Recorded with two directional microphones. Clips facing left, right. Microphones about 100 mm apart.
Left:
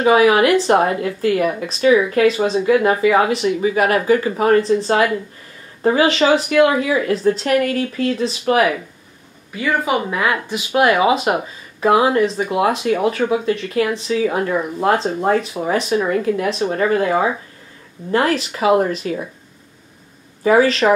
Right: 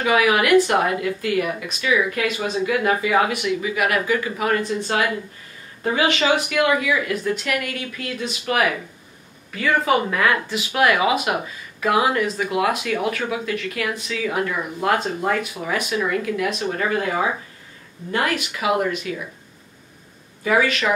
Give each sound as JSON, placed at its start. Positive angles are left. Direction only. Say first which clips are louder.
{"t": 0.0, "sound": "speech", "louder": "left 6 dB", "side_deg": 30}
{"t": 5.8, "sound": "speech", "louder": "left 6 dB", "side_deg": 35}
{"t": 9.6, "sound": "speech", "louder": "even", "side_deg": 15}
{"t": 20.4, "sound": "speech", "louder": "left 6 dB", "side_deg": 30}